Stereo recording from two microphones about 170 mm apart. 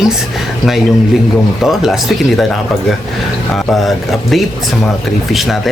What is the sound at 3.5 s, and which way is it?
Speech, centre (ahead or behind).